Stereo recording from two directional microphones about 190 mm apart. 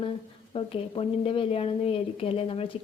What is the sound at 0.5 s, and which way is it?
A woman's voice, 30° left (ahead or behind).